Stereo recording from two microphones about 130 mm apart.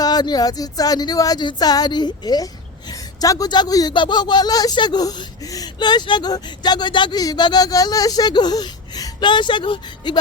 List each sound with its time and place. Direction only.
0.0 s speech: 30° left (ahead or behind)